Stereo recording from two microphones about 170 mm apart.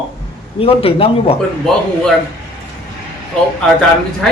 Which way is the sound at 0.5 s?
35° left (ahead or behind).